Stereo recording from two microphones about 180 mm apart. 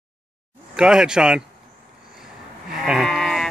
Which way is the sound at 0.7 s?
5° right (ahead or behind).